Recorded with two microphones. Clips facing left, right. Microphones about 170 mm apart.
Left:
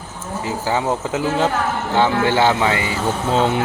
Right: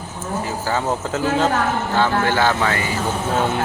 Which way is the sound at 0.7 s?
15° left (ahead or behind).